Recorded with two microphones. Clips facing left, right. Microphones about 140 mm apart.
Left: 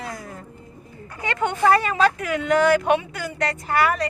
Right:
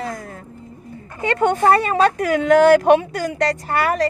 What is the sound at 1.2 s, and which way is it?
Speech, 40° right (ahead or behind).